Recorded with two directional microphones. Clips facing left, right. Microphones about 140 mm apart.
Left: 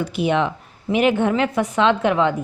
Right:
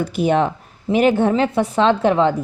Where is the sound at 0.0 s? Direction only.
40° right (ahead or behind).